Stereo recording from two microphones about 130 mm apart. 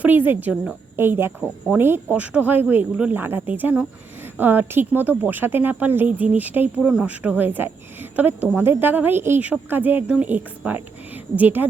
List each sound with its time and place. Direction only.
0.0 s speech: 15° right (ahead or behind)